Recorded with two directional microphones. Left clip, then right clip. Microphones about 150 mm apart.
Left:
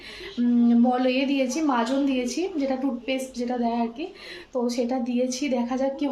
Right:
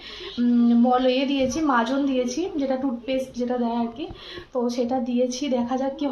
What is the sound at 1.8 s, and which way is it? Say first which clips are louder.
Speech: right 1 dB; 20° left (ahead or behind).